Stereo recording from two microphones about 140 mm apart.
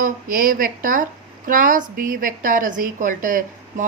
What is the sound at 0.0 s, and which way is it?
A woman's voice, 80° right.